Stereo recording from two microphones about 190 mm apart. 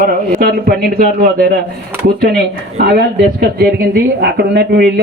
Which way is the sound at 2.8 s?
55° right (ahead or behind).